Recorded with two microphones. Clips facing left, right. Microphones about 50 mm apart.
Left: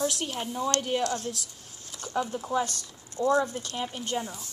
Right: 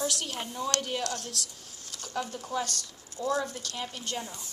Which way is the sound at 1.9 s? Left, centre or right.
Left.